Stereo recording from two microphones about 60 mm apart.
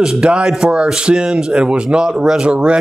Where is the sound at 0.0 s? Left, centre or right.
Centre.